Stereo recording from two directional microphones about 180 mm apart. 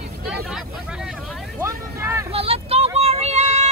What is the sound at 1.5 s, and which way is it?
Vehicle, 15° right (ahead or behind).